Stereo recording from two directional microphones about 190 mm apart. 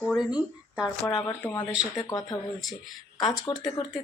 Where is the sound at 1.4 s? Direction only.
15° left (ahead or behind).